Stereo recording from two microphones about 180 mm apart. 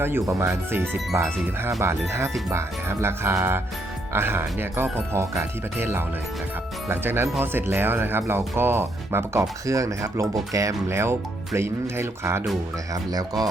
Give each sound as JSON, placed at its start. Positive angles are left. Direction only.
{"t": 0.0, "sound": "speech", "side_deg": -15}